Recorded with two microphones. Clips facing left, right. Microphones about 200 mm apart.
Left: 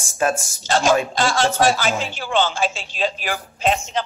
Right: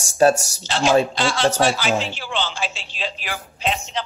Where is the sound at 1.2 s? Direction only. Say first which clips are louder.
Left 1 dB; 45° left (ahead or behind).